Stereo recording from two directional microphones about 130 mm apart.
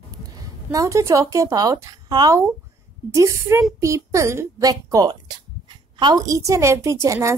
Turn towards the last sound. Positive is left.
turn(degrees=-20)  # may be behind; listen again after turning